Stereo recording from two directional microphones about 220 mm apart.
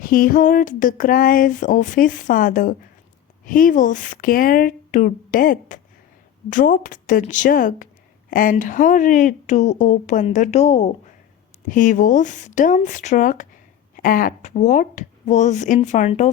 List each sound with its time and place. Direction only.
0.0 s speech: 40° left (ahead or behind)